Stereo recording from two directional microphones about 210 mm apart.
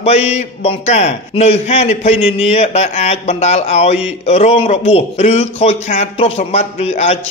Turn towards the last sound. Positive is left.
turn(degrees=30)  # may be behind; listen again after turning